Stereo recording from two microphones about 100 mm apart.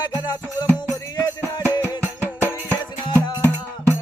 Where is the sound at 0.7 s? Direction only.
40° left (ahead or behind).